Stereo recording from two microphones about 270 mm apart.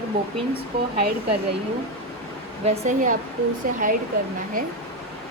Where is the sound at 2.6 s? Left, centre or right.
Right.